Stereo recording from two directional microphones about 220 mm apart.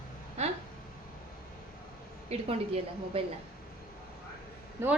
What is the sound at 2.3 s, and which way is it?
Speech, 25° right (ahead or behind).